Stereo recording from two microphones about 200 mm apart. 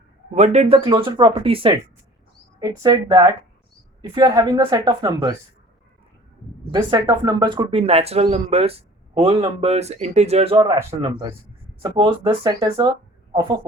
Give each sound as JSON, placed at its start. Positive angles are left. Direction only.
{"t": 0.3, "sound": "speech", "side_deg": -35}
{"t": 6.7, "sound": "speech", "side_deg": -20}
{"t": 11.8, "sound": "speech", "side_deg": -25}